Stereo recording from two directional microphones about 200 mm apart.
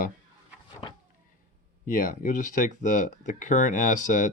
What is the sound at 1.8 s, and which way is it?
Speech, 45° left (ahead or behind).